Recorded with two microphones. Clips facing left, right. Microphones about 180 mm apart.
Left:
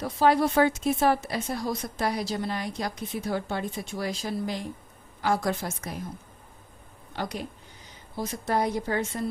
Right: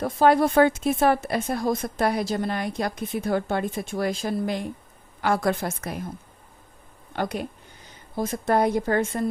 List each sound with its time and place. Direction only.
0.0 s speech: 50° right (ahead or behind)
7.1 s a woman's voice: 55° right (ahead or behind)